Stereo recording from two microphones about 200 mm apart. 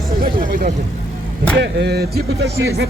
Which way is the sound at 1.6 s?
60° right (ahead or behind).